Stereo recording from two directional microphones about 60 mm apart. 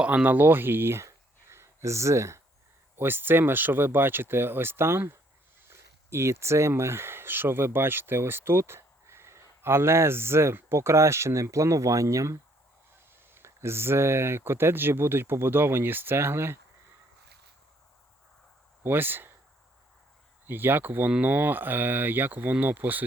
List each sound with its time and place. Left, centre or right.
0.0 s speech: centre
0.3 s speech: right
2.9 s speech: right
13.3 s speech: right
18.8 s speech: right
20.5 s speech: right